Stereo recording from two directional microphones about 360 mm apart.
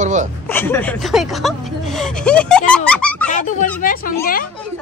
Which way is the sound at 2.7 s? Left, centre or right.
Centre.